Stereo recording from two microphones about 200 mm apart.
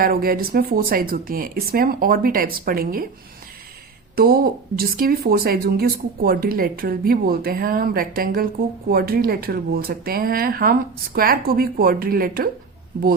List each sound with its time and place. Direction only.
0.0 s speech: 45° right (ahead or behind)
4.1 s speech: 50° right (ahead or behind)